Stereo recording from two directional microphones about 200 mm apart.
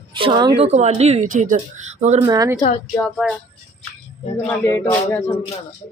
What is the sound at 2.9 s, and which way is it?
Speech, centre (ahead or behind).